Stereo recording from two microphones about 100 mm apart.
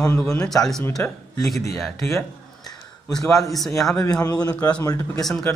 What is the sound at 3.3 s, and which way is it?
Speech, 35° left (ahead or behind).